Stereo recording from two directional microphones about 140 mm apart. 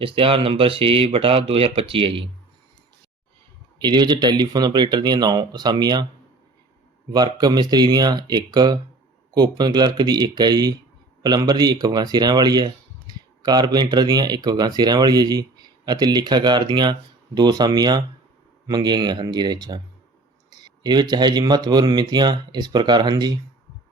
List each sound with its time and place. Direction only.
0.0 s speech: 40° right (ahead or behind)
3.8 s speech: 30° right (ahead or behind)
7.1 s speech: 30° right (ahead or behind)